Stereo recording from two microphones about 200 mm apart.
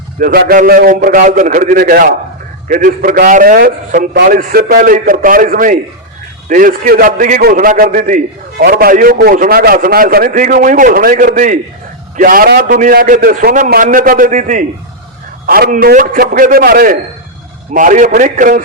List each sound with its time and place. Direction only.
0.2 s a man's voice: 50° right (ahead or behind)